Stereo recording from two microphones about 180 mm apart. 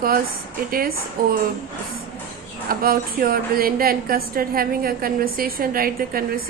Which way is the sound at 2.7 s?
55° right (ahead or behind).